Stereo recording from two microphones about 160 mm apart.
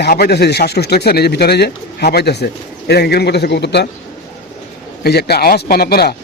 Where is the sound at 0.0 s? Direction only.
85° left.